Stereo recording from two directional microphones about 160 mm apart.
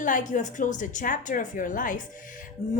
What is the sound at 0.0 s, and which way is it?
Speech, 55° left (ahead or behind).